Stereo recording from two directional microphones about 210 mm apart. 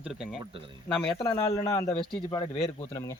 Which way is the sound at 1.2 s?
10° left (ahead or behind).